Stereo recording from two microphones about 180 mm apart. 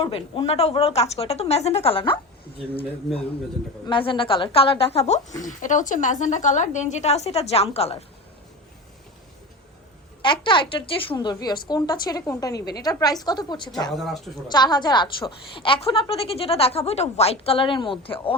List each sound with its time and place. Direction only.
0.0 s a woman's voice: 30° left (ahead or behind)
3.1 s speech: centre (ahead or behind)
3.8 s a woman's voice: 25° left (ahead or behind)
10.4 s a woman's voice: 25° left (ahead or behind)
13.9 s speech: centre (ahead or behind)
14.4 s a woman's voice: 25° left (ahead or behind)